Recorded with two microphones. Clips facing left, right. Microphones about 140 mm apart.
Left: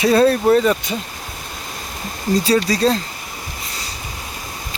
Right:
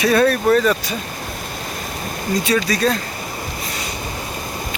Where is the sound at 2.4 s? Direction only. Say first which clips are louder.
Left 2 dB; 30° left (ahead or behind).